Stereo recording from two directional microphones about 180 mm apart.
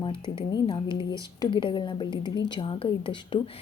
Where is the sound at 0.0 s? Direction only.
25° left (ahead or behind).